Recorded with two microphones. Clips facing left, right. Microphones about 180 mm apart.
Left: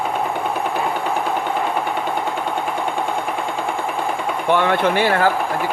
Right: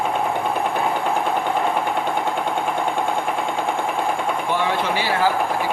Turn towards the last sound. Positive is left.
turn(degrees=55)  # may be behind; listen again after turning